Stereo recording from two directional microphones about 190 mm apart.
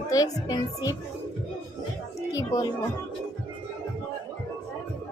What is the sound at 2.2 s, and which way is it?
Music, 20° left (ahead or behind).